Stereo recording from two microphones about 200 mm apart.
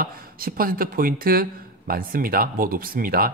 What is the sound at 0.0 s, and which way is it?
Speech, 45° right (ahead or behind).